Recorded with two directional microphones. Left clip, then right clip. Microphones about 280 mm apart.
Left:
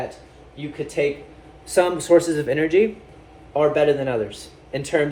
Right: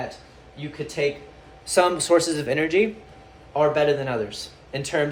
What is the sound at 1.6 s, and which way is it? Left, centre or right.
A man's voice, centre.